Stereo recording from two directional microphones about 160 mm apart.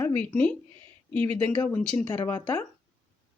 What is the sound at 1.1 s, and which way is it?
Speech, 15° left (ahead or behind).